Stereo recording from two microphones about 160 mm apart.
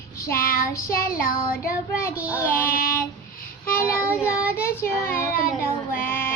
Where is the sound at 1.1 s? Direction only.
65° left (ahead or behind).